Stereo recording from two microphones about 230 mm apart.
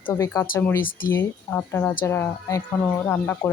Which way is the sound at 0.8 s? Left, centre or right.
Left.